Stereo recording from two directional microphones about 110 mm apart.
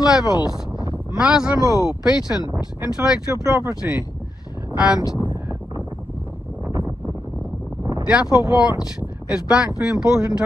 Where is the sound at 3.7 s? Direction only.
5° right (ahead or behind).